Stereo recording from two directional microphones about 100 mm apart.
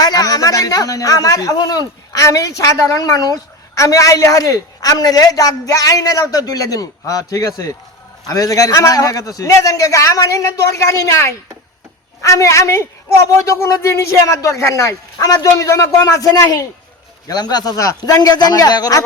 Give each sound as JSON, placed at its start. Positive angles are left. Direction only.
{"t": 0.0, "sound": "a man's voice", "side_deg": 40}